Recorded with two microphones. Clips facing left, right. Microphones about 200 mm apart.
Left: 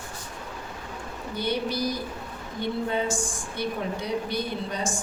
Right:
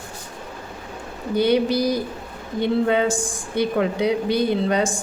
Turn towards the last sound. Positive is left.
turn(degrees=-80)